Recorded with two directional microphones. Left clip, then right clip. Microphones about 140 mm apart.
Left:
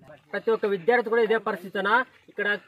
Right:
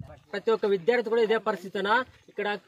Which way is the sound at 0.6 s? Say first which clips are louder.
Left 3 dB; 50° right (ahead or behind).